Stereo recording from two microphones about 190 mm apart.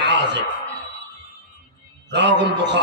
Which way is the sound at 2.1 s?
65° right (ahead or behind).